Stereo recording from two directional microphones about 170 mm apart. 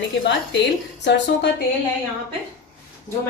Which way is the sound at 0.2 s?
90° left.